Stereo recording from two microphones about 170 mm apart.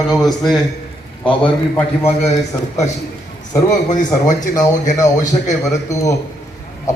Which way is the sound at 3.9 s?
45° left (ahead or behind).